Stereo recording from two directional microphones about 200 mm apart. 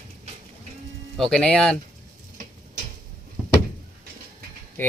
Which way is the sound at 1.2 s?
Centre (ahead or behind).